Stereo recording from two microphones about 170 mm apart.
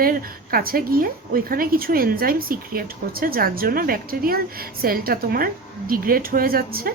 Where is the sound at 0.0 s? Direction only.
60° right (ahead or behind).